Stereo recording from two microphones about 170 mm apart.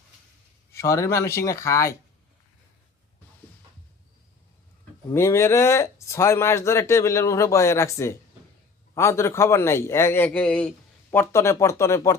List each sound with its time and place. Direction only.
0.7 s speech: 15° left (ahead or behind)
5.1 s speech: 15° left (ahead or behind)